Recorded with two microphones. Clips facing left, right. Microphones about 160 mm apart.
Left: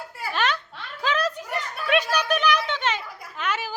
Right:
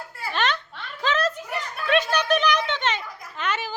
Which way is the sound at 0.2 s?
10° left (ahead or behind).